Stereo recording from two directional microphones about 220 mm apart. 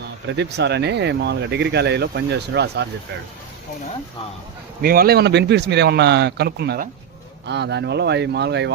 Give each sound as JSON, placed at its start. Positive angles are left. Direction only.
{"t": 0.3, "sound": "speech", "side_deg": -50}
{"t": 4.8, "sound": "speech", "side_deg": -45}